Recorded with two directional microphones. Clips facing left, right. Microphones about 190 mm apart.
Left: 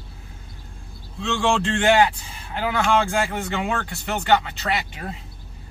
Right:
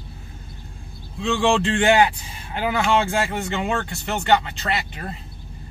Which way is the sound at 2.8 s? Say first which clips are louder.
Even; 5° right (ahead or behind).